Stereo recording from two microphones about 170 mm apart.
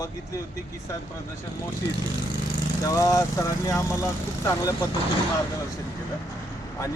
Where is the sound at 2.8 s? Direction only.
20° left (ahead or behind).